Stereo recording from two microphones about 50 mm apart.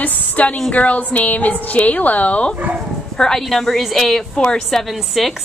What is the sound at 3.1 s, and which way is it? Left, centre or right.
A woman's voice, centre.